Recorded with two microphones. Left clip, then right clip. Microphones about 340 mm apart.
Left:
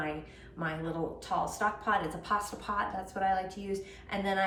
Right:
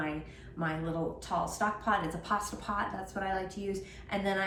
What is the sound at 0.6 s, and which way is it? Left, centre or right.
A woman's voice, centre.